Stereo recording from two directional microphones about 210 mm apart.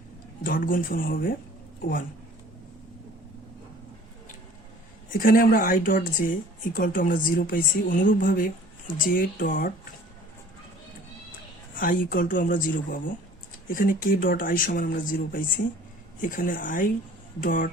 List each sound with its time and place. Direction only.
0.4 s speech: 40° left (ahead or behind)
5.1 s speech: 40° left (ahead or behind)
11.8 s speech: 40° left (ahead or behind)